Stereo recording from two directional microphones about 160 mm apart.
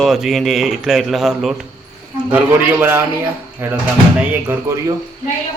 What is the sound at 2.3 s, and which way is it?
A man's voice, 10° right (ahead or behind).